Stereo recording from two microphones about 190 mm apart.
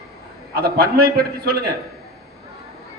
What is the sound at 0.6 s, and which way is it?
Speech, 55° right (ahead or behind).